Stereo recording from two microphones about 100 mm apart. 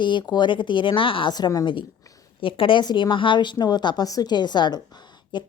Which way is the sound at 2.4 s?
60° left (ahead or behind).